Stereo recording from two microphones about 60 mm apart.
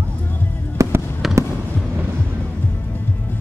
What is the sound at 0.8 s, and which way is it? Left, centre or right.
Fireworks, right.